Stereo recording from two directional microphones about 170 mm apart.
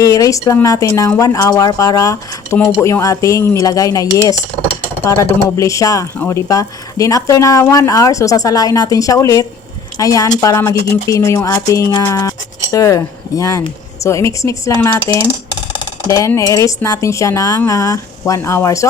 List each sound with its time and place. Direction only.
0.0 s speech: 20° left (ahead or behind)